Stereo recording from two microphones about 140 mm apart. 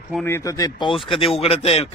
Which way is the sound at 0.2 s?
20° left (ahead or behind).